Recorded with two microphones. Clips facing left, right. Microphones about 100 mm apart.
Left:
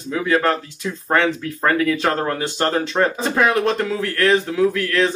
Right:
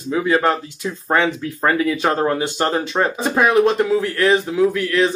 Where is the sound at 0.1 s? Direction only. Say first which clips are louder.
Right 1 dB; 15° right (ahead or behind).